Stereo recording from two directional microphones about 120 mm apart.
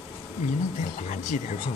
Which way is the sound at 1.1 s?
90° left.